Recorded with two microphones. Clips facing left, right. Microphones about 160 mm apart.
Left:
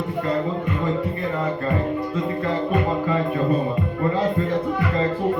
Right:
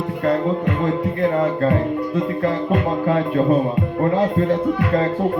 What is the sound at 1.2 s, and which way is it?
Music, 70° right (ahead or behind).